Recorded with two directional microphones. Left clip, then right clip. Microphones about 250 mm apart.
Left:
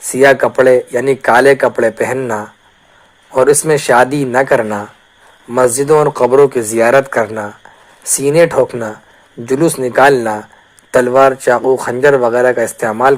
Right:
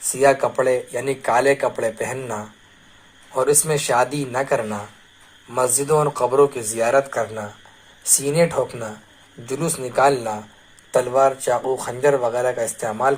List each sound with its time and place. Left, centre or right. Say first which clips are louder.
0.0 s speech: left 8 dB; left